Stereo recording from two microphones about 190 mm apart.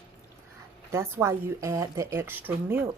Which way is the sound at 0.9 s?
15° right (ahead or behind).